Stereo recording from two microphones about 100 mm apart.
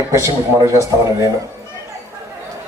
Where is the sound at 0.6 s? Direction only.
30° right (ahead or behind).